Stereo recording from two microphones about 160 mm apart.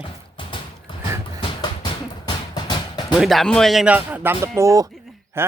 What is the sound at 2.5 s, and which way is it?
Music, 25° left (ahead or behind).